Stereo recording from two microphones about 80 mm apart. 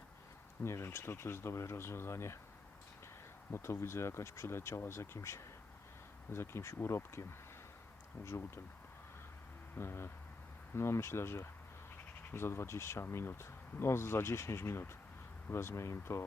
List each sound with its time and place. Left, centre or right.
0.6 s speech: left
3.5 s speech: left
9.7 s speech: left